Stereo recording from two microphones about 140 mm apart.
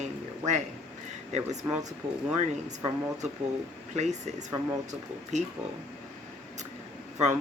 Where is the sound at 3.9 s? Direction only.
55° right (ahead or behind).